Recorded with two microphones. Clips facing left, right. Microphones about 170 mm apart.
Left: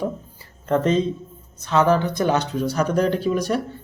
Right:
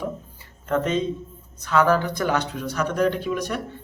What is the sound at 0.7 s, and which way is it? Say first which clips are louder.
Speech: left 4 dB; 35° left (ahead or behind).